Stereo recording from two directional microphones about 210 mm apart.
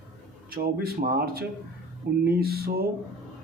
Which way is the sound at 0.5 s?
45° right (ahead or behind).